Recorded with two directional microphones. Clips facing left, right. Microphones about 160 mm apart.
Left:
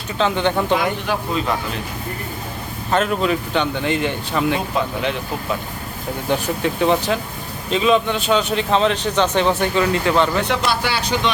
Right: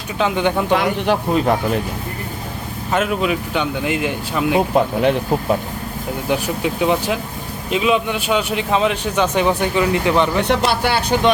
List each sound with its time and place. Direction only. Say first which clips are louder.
0.2 s speech: right 1 dB; 10° right (ahead or behind)
1.0 s speech: right 5 dB; 55° right (ahead or behind)
2.9 s speech: even; 5° right (ahead or behind)
4.7 s speech: right 6 dB; 50° right (ahead or behind)
6.2 s speech: even; 10° right (ahead or behind)
10.7 s speech: right 3 dB; 55° right (ahead or behind)